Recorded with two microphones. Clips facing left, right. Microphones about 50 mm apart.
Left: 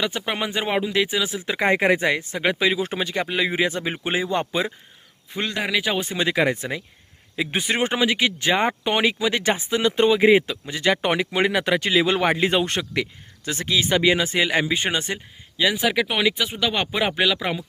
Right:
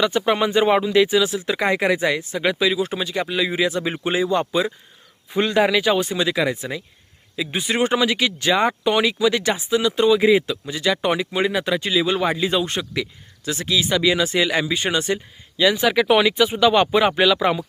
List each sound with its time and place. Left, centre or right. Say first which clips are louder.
0.0 s speech: right 6 dB; centre
1.2 s speech: right 2 dB; left
5.3 s speech: right 7 dB; centre
6.0 s speech: right 1 dB; left
7.7 s speech: right 3 dB; left
11.3 s speech: even; left
15.5 s speech: right 3 dB; centre